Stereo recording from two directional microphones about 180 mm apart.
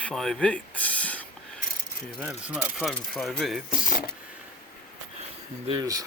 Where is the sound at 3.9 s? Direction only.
60° left (ahead or behind).